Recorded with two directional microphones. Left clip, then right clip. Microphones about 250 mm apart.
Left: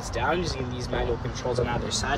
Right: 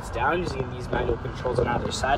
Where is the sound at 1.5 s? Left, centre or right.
Centre.